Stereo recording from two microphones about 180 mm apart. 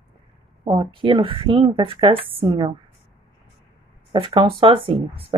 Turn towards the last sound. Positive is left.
turn(degrees=-30)  # may be behind; listen again after turning